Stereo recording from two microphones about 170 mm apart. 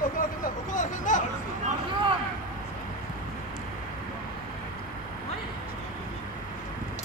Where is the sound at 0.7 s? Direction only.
50° left (ahead or behind).